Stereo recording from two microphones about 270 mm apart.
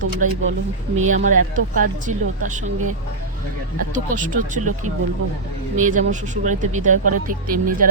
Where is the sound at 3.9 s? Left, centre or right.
Right.